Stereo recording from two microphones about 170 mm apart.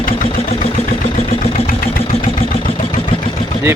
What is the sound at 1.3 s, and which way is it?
Vehicle, 50° left (ahead or behind).